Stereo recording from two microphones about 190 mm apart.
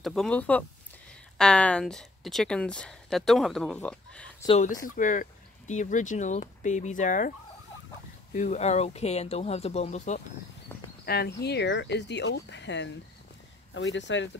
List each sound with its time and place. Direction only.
0.0 s speech: centre (ahead or behind)
4.5 s speech: 40° left (ahead or behind)
11.1 s speech: 55° left (ahead or behind); by 14.3 s 75° left (ahead or behind)